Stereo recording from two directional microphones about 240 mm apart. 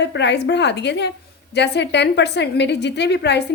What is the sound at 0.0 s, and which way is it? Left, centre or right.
A woman's voice, left.